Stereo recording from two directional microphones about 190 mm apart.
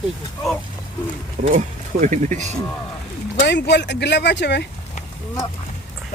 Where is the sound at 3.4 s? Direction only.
65° left (ahead or behind).